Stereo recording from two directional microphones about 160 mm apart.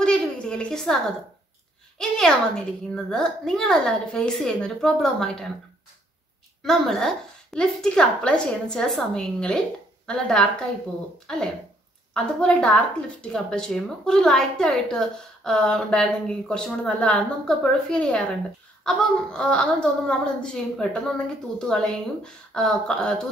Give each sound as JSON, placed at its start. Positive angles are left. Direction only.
{"t": 0.0, "sound": "a sound", "side_deg": 5}
{"t": 2.0, "sound": "a woman's voice", "side_deg": 5}
{"t": 6.6, "sound": "a woman's voice", "side_deg": 0}